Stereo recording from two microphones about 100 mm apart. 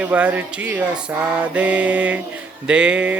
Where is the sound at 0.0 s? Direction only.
15° right (ahead or behind).